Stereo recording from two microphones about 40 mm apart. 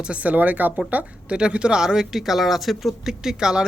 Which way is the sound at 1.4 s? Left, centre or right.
Right.